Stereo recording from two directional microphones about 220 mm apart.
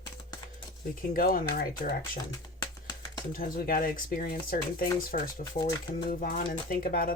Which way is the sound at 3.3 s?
40° left (ahead or behind).